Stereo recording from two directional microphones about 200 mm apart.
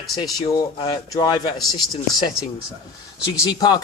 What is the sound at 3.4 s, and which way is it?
Speech, 20° left (ahead or behind).